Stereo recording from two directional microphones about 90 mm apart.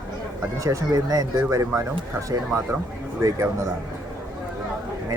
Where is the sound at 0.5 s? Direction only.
40° right (ahead or behind).